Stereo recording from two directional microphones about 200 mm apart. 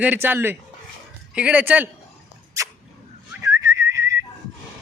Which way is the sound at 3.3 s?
15° right (ahead or behind).